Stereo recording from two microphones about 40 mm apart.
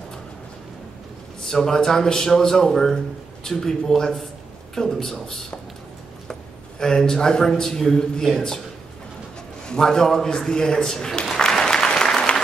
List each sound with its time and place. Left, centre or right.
1.5 s a man's voice: centre
6.8 s a man's voice: centre
9.7 s a man's voice: centre
11.5 s applause: centre
12.3 s applause: left